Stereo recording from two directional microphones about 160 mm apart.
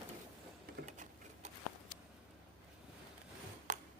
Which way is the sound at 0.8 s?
50° right (ahead or behind).